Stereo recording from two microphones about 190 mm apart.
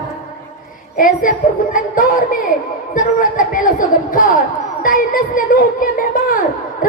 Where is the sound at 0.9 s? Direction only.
45° left (ahead or behind).